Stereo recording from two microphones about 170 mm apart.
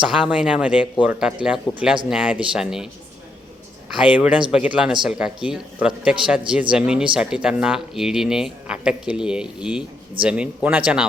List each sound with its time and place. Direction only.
0.0 s speech: 5° right (ahead or behind)
3.9 s speech: 5° right (ahead or behind)